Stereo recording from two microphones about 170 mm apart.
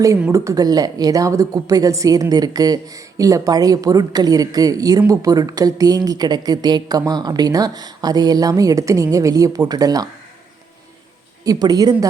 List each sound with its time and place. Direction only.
0.3 s a woman's voice: 20° right (ahead or behind)
11.4 s a woman's voice: 20° right (ahead or behind)